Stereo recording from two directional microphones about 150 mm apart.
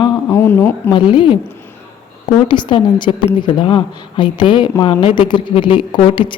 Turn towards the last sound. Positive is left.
turn(degrees=35)  # may be behind; listen again after turning